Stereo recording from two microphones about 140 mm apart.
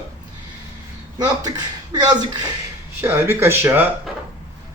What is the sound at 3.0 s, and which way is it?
Speech, 15° right (ahead or behind).